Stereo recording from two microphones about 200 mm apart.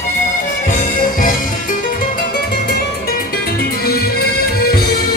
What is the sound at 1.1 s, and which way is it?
Music, 45° left (ahead or behind).